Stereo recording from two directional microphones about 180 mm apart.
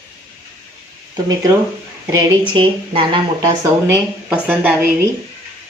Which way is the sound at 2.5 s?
25° right (ahead or behind).